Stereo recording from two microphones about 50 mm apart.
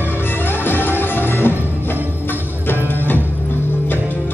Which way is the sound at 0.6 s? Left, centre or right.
Left.